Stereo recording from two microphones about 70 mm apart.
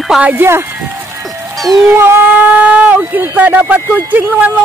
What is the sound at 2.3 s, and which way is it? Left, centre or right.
Speech, right.